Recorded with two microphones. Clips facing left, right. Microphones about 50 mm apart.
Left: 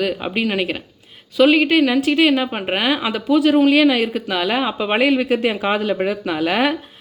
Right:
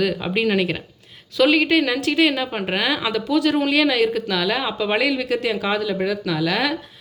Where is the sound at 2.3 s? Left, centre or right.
Centre.